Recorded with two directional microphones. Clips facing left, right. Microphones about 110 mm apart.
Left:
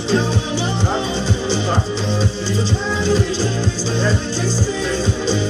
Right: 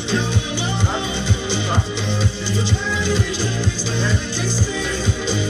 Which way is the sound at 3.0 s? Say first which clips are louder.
Left 6 dB; 30° left (ahead or behind).